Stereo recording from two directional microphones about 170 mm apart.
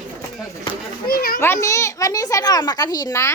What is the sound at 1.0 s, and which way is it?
Speech, 60° left (ahead or behind).